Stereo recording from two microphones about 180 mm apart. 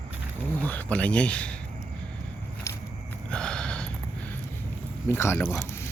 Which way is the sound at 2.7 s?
15° left (ahead or behind).